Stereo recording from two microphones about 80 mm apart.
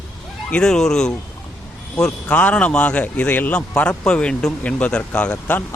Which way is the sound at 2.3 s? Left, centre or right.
Centre.